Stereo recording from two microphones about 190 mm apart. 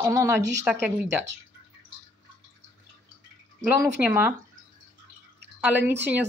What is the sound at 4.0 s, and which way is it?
Speech, 10° right (ahead or behind).